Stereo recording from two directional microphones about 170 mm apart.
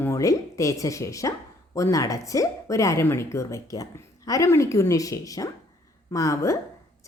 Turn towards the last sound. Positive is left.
turn(degrees=20)  # may be behind; listen again after turning